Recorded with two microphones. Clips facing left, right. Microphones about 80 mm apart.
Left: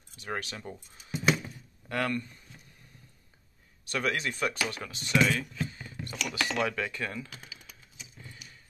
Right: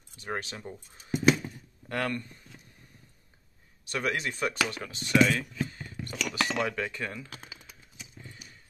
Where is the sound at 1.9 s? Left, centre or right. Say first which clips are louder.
Left 1 dB; right.